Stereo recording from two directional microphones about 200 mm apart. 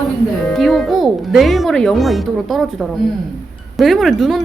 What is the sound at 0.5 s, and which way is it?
A woman's voice, centre (ahead or behind).